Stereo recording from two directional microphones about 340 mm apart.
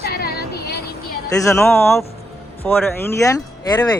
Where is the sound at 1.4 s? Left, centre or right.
Centre.